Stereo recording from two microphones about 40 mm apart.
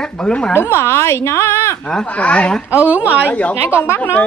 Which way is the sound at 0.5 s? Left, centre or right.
Left.